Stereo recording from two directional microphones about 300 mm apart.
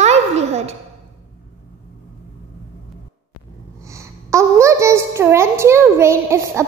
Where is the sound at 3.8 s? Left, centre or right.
Centre.